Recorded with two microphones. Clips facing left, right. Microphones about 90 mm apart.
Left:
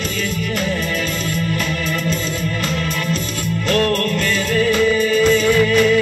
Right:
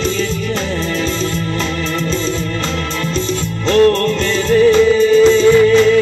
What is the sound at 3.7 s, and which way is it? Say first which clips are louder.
Music: right 7 dB; 25° right (ahead or behind).